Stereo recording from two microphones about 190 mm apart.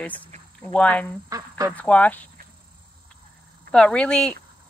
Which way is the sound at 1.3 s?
15° right (ahead or behind).